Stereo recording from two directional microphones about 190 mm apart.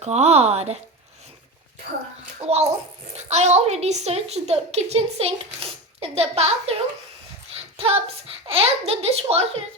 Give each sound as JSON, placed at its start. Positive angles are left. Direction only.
{"t": 0.0, "sound": "a woman's voice", "side_deg": -35}
{"t": 2.5, "sound": "a woman's voice", "side_deg": -35}
{"t": 7.8, "sound": "a woman's voice", "side_deg": -30}